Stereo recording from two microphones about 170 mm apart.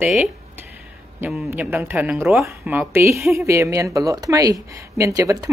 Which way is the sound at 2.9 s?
15° right (ahead or behind).